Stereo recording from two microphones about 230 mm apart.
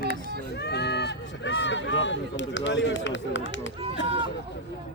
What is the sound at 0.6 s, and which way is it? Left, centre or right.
Speech, left.